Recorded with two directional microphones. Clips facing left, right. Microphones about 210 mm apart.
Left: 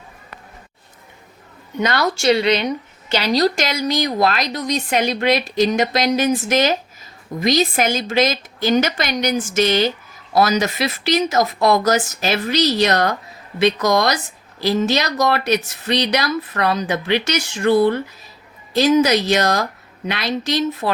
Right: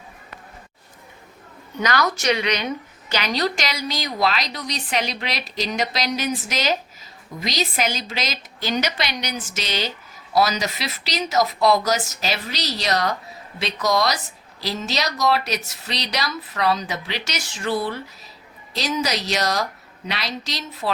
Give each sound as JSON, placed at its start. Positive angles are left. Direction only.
{"t": 1.8, "sound": "a woman's voice", "side_deg": 30}